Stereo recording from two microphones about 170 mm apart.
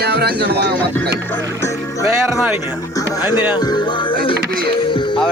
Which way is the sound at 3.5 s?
25° left (ahead or behind).